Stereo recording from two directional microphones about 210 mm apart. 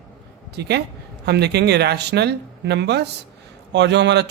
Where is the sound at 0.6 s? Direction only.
55° right (ahead or behind).